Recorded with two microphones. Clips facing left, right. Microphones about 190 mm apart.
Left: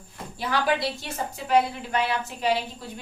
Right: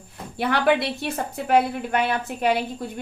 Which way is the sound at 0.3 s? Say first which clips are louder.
Right 5 dB; 60° right (ahead or behind).